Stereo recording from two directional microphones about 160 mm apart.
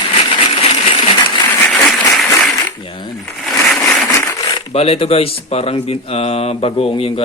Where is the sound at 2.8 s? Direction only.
30° left (ahead or behind).